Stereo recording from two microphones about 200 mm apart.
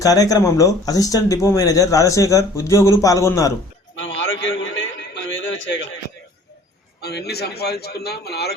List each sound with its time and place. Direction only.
0.0 s speech: 15° left (ahead or behind)
4.2 s a sound: 70° left (ahead or behind)
7.0 s a man's voice: 55° left (ahead or behind)